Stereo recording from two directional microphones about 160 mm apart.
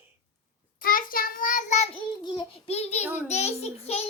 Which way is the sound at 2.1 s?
30° left (ahead or behind).